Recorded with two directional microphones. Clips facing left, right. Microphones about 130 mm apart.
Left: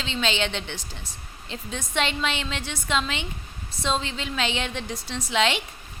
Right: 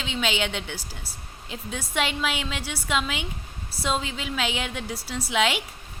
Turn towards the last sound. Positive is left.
turn(degrees=-5)  # may be behind; listen again after turning